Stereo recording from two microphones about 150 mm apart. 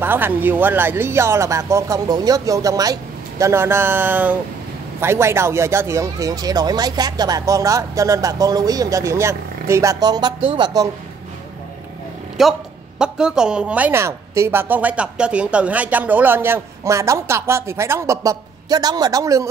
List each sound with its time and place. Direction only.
0.0 s a woman's voice: 15° right (ahead or behind); by 10.7 s 35° right (ahead or behind)
12.4 s a woman's voice: 5° right (ahead or behind); by 19.4 s 25° right (ahead or behind)